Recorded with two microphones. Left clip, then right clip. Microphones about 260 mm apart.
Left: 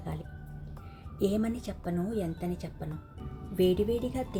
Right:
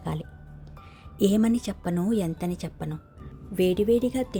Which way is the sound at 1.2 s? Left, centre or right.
Right.